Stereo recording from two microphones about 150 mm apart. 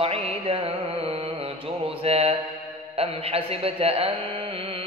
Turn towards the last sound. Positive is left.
turn(degrees=-40)  # may be behind; listen again after turning